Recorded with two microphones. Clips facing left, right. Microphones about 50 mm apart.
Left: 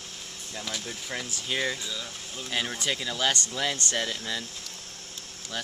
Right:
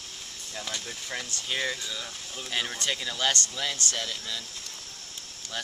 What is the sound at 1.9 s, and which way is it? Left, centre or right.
Speech, centre.